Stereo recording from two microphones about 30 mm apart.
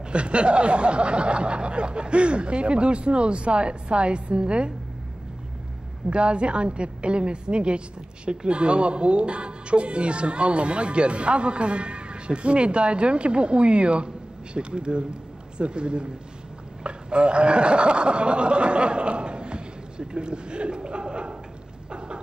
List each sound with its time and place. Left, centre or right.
0.1 s speech: right
6.0 s speech: right
21.9 s a sound: right